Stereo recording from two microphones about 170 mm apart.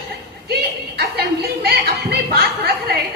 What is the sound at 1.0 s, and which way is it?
Speech, 70° right (ahead or behind).